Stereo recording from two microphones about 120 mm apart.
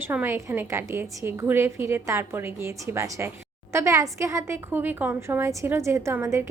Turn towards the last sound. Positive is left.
turn(degrees=-20)  # may be behind; listen again after turning